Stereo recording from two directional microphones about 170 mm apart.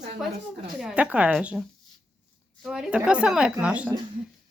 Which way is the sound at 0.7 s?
5° right (ahead or behind).